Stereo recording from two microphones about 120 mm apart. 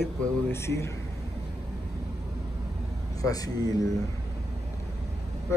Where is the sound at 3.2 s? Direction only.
30° left (ahead or behind).